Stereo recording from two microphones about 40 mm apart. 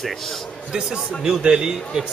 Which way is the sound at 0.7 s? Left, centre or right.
Centre.